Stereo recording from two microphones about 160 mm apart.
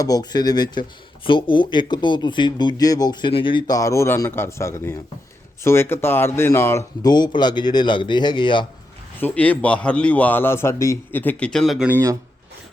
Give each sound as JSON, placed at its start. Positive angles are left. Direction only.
{"t": 0.0, "sound": "speech", "side_deg": 25}
{"t": 9.2, "sound": "a man's voice", "side_deg": 10}
{"t": 11.9, "sound": "speech", "side_deg": -15}